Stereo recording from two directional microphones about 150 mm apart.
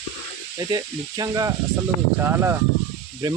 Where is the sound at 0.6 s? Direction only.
25° right (ahead or behind).